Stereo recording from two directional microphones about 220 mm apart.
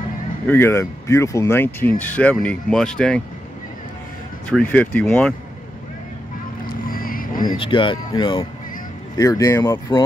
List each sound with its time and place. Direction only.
0.5 s speech: 10° left (ahead or behind)
4.5 s speech: 5° left (ahead or behind)
6.9 s vehicle: 40° left (ahead or behind)
7.4 s speech: 25° left (ahead or behind)